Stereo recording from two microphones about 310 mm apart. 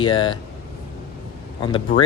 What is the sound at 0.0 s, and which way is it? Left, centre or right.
Speech, centre.